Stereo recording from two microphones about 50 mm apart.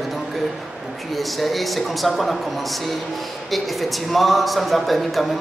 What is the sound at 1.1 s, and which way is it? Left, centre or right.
Speech, centre.